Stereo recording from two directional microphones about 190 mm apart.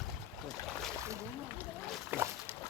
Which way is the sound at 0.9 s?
15° right (ahead or behind).